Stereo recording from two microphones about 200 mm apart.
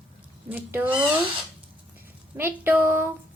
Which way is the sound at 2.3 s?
10° right (ahead or behind).